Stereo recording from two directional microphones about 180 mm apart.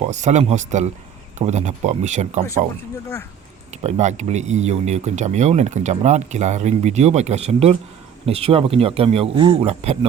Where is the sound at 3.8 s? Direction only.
40° right (ahead or behind).